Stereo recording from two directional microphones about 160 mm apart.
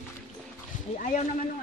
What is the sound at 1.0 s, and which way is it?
Speech, 50° left (ahead or behind).